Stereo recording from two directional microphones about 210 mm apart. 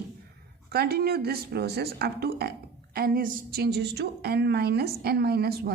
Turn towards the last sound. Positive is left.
turn(degrees=-50)  # may be behind; listen again after turning